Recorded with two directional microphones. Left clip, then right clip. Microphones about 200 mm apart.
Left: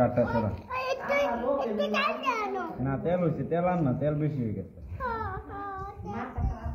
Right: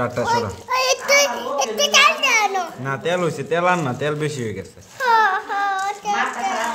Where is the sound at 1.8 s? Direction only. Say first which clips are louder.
Right 17 dB; 35° right (ahead or behind).